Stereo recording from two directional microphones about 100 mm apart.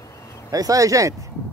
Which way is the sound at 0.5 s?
35° right (ahead or behind).